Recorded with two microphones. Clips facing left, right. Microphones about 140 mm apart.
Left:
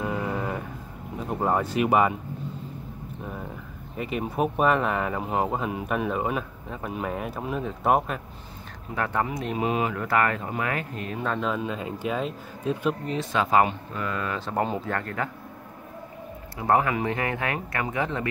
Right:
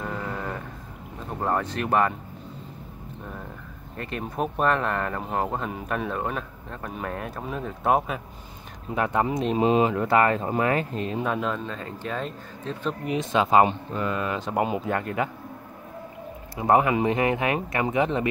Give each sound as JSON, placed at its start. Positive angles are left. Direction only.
{"t": 0.0, "sound": "vehicle", "side_deg": 10}
{"t": 1.3, "sound": "speech", "side_deg": 10}
{"t": 3.9, "sound": "speech", "side_deg": 5}
{"t": 8.9, "sound": "speech", "side_deg": -20}
{"t": 11.2, "sound": "speech", "side_deg": -5}
{"t": 11.5, "sound": "speech", "side_deg": 10}
{"t": 13.0, "sound": "speech", "side_deg": -15}
{"t": 16.5, "sound": "speech", "side_deg": -20}